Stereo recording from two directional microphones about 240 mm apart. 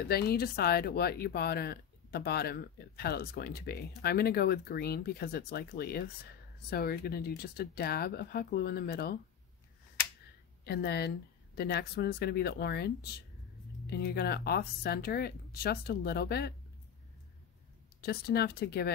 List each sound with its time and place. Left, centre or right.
0.1 s speech: left
10.6 s speech: left
18.0 s speech: left